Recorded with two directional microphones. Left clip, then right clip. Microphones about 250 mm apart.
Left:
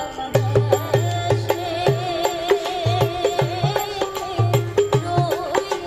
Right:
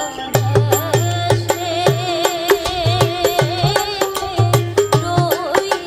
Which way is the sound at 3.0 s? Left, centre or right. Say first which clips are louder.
Right 5 dB; right.